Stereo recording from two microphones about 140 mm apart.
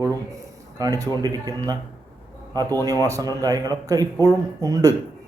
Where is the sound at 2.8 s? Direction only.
25° right (ahead or behind).